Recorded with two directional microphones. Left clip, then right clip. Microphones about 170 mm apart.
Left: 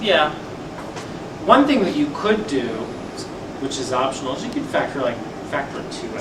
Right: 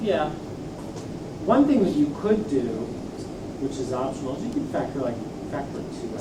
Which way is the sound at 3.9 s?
30° left (ahead or behind).